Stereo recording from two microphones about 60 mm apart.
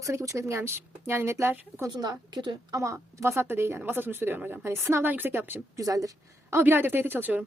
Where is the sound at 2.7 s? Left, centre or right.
Right.